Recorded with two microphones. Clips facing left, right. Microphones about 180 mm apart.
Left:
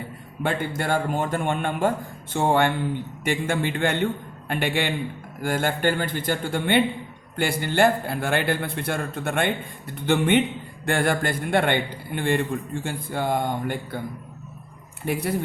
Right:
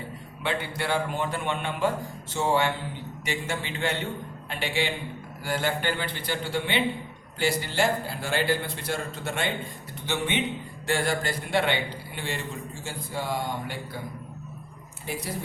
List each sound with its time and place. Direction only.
0.4 s a man's voice: 45° left (ahead or behind)
15.0 s a man's voice: 60° left (ahead or behind)